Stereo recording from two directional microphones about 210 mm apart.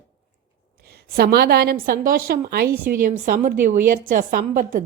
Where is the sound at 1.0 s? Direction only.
45° right (ahead or behind).